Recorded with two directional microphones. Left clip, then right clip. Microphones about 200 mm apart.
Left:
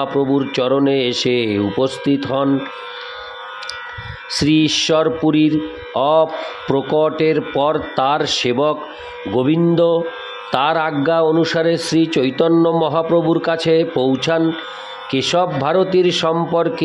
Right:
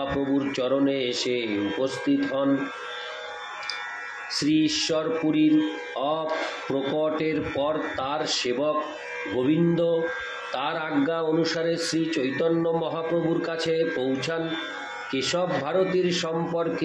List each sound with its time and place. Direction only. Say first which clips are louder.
0.5 s a man's voice: left 8 dB; 55° left (ahead or behind)
4.3 s a man's voice: left 8 dB; 60° left (ahead or behind)